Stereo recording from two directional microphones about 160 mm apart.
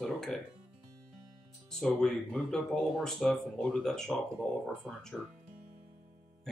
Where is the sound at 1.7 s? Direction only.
5° left (ahead or behind).